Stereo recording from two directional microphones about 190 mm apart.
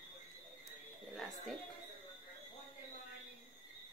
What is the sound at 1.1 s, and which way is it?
Speech, centre (ahead or behind).